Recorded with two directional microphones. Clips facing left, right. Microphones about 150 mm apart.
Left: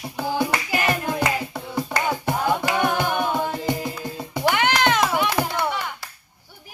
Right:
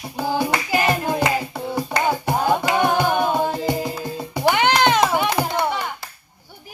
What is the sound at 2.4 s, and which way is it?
Music, 25° right (ahead or behind).